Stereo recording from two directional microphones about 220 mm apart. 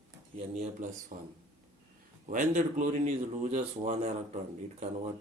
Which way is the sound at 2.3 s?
35° right (ahead or behind).